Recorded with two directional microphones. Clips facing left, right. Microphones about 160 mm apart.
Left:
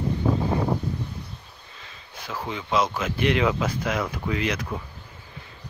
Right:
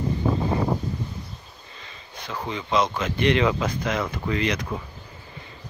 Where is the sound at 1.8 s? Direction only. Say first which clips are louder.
Right 1 dB; 5° left (ahead or behind).